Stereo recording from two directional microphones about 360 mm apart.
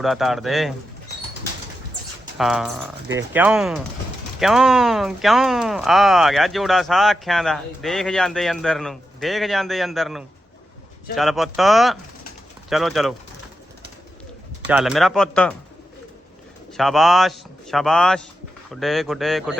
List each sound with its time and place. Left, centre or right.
0.0 s speech: centre
2.4 s speech: centre
14.7 s speech: centre
16.7 s speech: centre